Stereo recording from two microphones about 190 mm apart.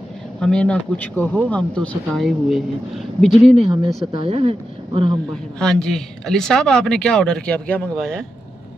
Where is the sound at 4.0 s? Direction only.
30° right (ahead or behind).